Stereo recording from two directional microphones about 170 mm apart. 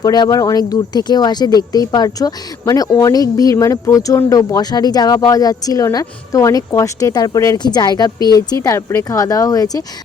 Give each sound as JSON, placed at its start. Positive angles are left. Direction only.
{"t": 0.0, "sound": "speech", "side_deg": 20}